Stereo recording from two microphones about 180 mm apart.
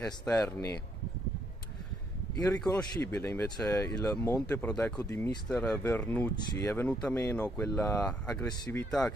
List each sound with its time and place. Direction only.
0.0 s speech: 5° left (ahead or behind)
2.3 s speech: 20° left (ahead or behind)
8.3 s speech: 20° left (ahead or behind)